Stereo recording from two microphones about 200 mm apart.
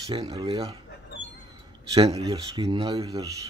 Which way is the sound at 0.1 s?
30° right (ahead or behind).